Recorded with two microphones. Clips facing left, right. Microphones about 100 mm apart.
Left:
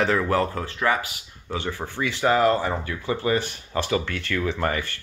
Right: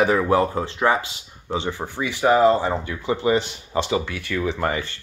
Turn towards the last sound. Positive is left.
turn(degrees=-15)  # may be behind; listen again after turning